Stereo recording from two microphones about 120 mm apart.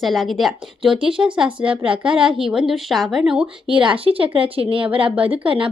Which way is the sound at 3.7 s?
45° right (ahead or behind).